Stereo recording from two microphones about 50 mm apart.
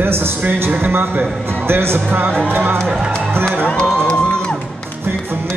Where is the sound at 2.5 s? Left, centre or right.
Right.